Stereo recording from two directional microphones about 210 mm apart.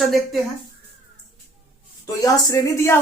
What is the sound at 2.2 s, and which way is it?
Speech, 15° left (ahead or behind).